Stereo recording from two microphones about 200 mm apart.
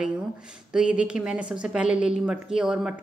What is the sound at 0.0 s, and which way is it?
A woman's voice, 5° right (ahead or behind).